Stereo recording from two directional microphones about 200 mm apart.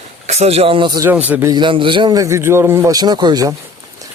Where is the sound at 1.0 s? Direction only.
10° right (ahead or behind).